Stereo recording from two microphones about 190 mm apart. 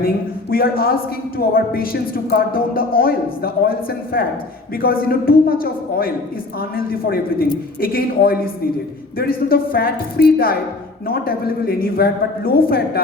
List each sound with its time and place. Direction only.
0.5 s speech: 50° left (ahead or behind)